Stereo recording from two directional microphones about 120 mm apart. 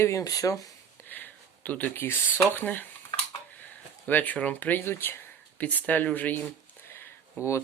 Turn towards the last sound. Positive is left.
turn(degrees=20)  # may be behind; listen again after turning